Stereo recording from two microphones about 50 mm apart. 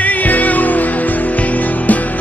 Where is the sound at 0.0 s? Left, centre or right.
Left.